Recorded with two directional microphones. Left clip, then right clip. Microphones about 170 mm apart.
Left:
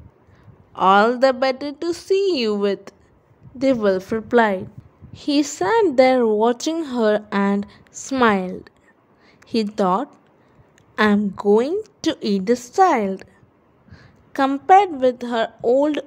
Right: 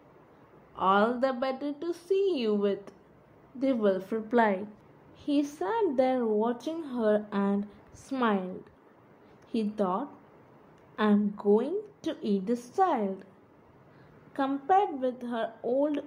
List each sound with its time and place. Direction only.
0.7 s a woman's voice: 60° left (ahead or behind)
5.1 s a woman's voice: 65° left (ahead or behind)
14.3 s a woman's voice: 65° left (ahead or behind)